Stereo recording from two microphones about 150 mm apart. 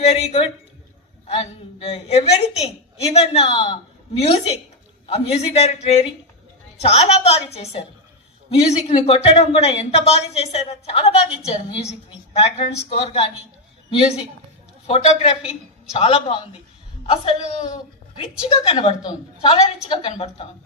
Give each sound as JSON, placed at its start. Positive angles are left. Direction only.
{"t": 0.0, "sound": "a woman's voice", "side_deg": 45}
{"t": 14.8, "sound": "a woman's voice", "side_deg": 40}